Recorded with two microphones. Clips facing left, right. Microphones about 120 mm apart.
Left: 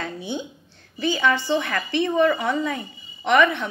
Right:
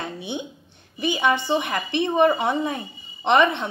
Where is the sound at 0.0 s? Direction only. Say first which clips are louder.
Left 1 dB; 20° right (ahead or behind).